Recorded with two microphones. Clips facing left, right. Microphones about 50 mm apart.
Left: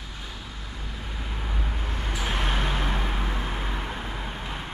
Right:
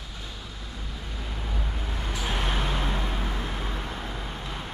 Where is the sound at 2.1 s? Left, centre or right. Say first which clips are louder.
Left 1 dB; centre.